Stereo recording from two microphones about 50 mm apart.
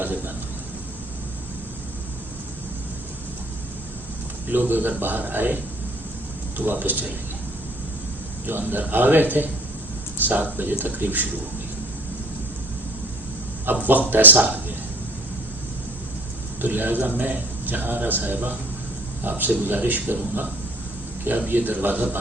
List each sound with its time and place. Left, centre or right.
4.4 s a man's voice: right
6.6 s a man's voice: right
8.4 s a man's voice: right
13.7 s a man's voice: right
16.6 s a man's voice: right